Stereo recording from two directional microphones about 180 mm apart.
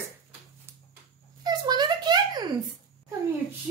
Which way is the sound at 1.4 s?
25° right (ahead or behind).